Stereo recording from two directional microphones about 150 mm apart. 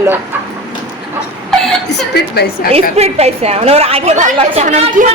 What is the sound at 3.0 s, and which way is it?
A woman's voice, 45° right (ahead or behind).